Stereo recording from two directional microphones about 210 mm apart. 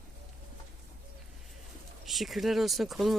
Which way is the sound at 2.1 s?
Centre (ahead or behind).